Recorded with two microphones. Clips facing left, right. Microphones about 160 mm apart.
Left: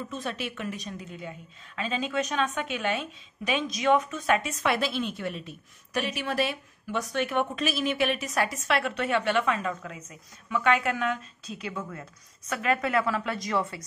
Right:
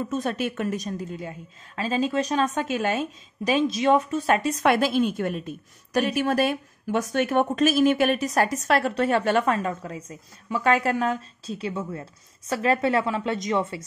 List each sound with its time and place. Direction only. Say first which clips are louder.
0.1 s a woman's voice: right 7 dB; 45° right (ahead or behind)
4.6 s a woman's voice: right 7 dB; 50° right (ahead or behind); by 13.8 s 25° right (ahead or behind)